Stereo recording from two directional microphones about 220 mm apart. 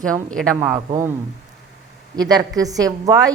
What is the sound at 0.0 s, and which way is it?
Speech, 5° left (ahead or behind).